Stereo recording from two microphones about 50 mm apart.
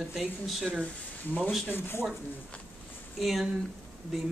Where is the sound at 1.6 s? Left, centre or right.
Left.